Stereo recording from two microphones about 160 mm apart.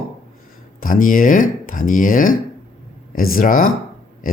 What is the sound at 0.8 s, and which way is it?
Speech, 60° left (ahead or behind).